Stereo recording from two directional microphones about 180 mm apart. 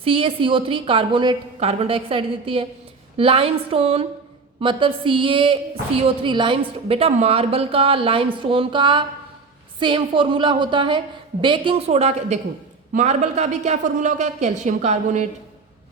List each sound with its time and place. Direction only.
0.0 s a woman's voice: 30° right (ahead or behind)